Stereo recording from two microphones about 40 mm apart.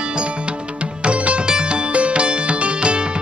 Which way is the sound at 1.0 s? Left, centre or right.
Right.